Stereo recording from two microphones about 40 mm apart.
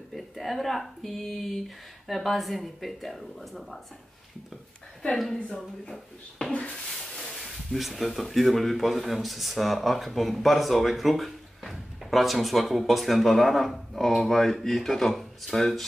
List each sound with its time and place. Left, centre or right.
0.1 s speech: centre
5.3 s a woman's voice: centre
7.2 s speech: centre